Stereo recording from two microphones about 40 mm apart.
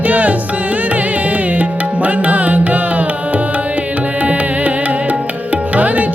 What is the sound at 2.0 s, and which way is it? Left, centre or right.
Music, right.